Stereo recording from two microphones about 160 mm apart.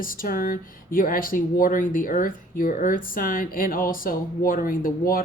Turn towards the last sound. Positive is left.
turn(degrees=60)  # may be behind; listen again after turning